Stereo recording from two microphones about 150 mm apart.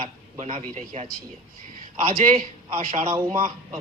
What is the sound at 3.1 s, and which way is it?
Speech, 25° right (ahead or behind).